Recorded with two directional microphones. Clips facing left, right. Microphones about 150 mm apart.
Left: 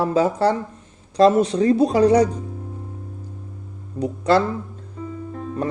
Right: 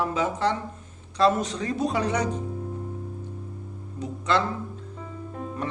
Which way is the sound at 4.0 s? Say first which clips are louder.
Left 7 dB; 35° left (ahead or behind).